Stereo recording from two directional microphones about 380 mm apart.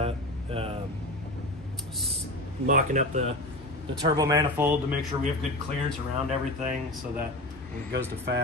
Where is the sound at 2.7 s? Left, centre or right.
Centre.